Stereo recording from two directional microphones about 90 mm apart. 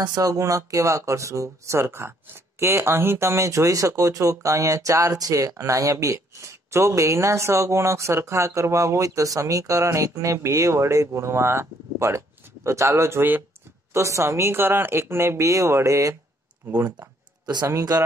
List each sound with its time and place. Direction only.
0.0 s speech: 45° right (ahead or behind); by 17.1 s 25° right (ahead or behind)
17.6 s speech: 40° right (ahead or behind)